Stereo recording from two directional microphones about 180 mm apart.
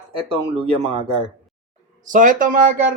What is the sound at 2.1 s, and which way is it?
Speech, 45° right (ahead or behind).